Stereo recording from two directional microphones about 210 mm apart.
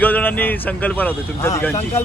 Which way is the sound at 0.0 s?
10° left (ahead or behind).